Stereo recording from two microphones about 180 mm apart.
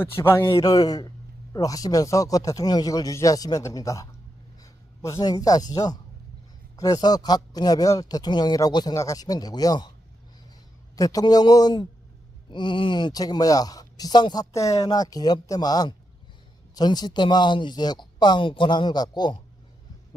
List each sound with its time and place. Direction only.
0.0 s speech: 15° left (ahead or behind)
10.9 s speech: 20° left (ahead or behind)